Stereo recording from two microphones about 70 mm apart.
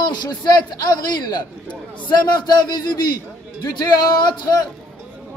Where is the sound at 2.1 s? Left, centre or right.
Left.